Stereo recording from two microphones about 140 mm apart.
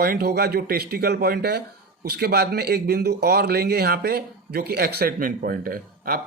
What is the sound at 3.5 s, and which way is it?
A man's voice, 90° right.